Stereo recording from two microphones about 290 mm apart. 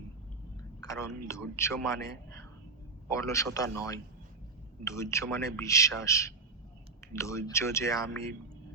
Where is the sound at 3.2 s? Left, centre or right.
Centre.